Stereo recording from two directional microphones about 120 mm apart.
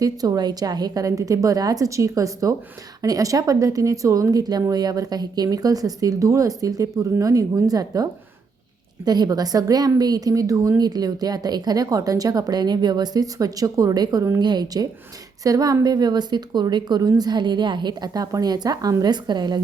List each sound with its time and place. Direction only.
0.0 s a woman's voice: 30° right (ahead or behind)